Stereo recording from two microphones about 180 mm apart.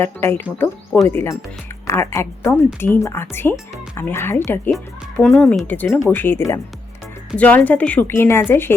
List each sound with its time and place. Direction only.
0.0 s speech: 15° left (ahead or behind)
4.7 s speech: centre (ahead or behind)